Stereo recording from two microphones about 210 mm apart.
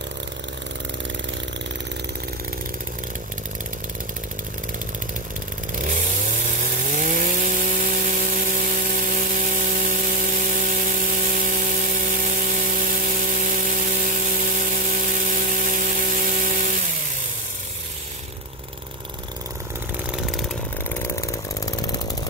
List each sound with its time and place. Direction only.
6.9 s sawing: 40° right (ahead or behind)
13.2 s a sound: 40° right (ahead or behind)
21.0 s chainsaw: 15° left (ahead or behind)